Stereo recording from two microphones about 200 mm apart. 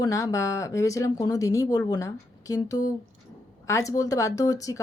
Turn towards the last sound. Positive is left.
turn(degrees=15)  # may be behind; listen again after turning